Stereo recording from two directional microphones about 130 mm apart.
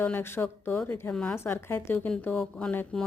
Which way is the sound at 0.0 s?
15° left (ahead or behind).